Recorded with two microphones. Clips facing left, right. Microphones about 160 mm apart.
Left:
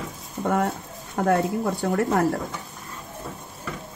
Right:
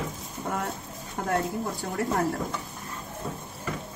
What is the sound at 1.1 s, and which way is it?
Speech, 70° left (ahead or behind).